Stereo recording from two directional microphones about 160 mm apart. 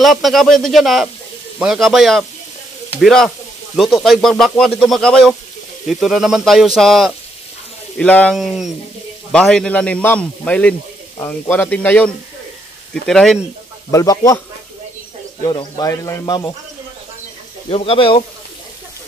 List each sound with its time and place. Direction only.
0.0 s speech: centre (ahead or behind)
13.8 s a man's voice: 20° left (ahead or behind)
15.4 s a man's voice: 30° left (ahead or behind)
17.6 s speech: 40° left (ahead or behind)